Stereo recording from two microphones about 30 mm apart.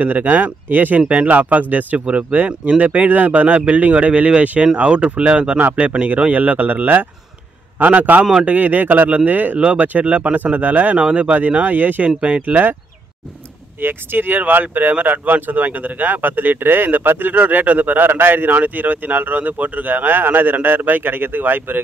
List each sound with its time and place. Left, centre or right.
0.0 s speech: right
1.0 s speech: right
1.3 s speech: right
4.8 s speech: right
6.2 s speech: right
9.6 s speech: right
10.3 s speech: right
12.4 s speech: right
14.3 s speech: right